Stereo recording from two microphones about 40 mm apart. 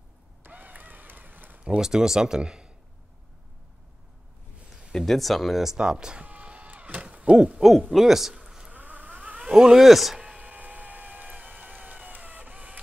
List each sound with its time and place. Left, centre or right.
0.4 s a sound: right
1.8 s speech: centre
4.9 s speech: centre
5.8 s speech: centre
6.2 s a sound: right
7.0 s hoot: right
7.3 s speech: centre
7.9 s speech: centre
8.5 s insect: centre
8.7 s vehicle: right
9.5 s speech: centre
10.1 s a sound: centre
10.4 s a sound: right